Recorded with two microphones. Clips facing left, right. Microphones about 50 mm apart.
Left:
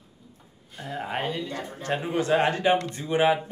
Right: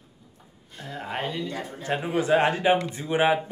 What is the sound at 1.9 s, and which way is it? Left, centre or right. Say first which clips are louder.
A man's voice: right 1 dB; centre.